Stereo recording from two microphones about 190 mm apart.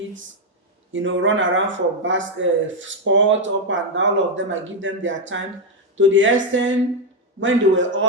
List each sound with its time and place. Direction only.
0.9 s speech: 85° right